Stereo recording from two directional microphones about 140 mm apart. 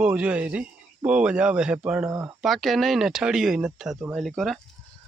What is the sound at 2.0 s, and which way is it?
Speech, 20° right (ahead or behind).